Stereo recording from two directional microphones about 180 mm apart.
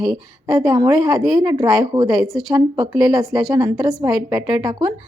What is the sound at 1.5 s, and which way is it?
Speech, 20° right (ahead or behind).